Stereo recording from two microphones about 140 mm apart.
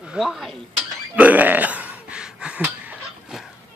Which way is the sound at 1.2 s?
10° right (ahead or behind).